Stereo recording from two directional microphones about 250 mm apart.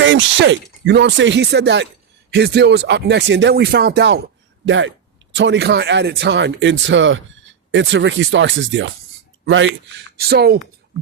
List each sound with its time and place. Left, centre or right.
0.0 s speech: right